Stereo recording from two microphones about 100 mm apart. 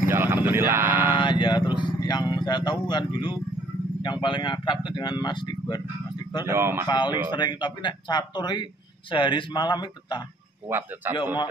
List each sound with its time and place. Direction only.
0.1 s a sound: 20° right (ahead or behind)
1.2 s vehicle: 50° left (ahead or behind)
4.0 s a man's voice: 50° left (ahead or behind)
6.4 s speech: 25° right (ahead or behind)
6.9 s speech: 45° left (ahead or behind)
10.7 s speech: 20° right (ahead or behind)